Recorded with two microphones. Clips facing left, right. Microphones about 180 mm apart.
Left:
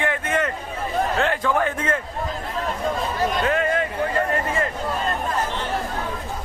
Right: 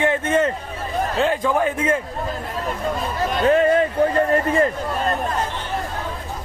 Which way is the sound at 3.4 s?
35° right (ahead or behind).